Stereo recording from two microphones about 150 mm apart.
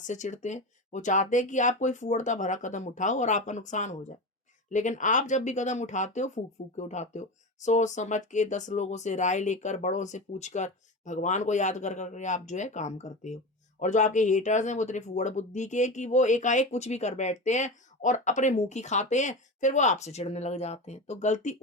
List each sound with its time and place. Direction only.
0.1 s speech: 55° left (ahead or behind)